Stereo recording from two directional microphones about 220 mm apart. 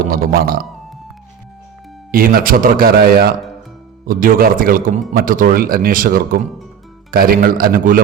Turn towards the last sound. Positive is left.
turn(degrees=-40)  # may be behind; listen again after turning